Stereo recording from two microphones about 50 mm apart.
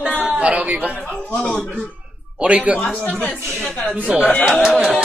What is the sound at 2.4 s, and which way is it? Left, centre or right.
Speech, right.